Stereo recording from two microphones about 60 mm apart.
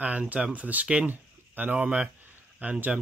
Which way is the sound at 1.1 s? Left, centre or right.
Right.